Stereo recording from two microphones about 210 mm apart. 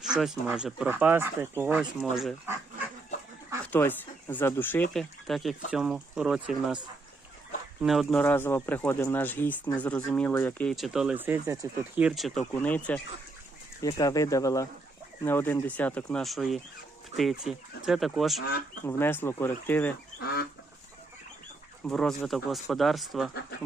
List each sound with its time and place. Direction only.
0.0 s speech: centre (ahead or behind)
3.7 s speech: 10° left (ahead or behind)
7.8 s speech: centre (ahead or behind)
11.9 s speech: centre (ahead or behind)
18.9 s speech: 10° left (ahead or behind)
20.1 s duck: 50° left (ahead or behind)
21.8 s speech: 5° left (ahead or behind)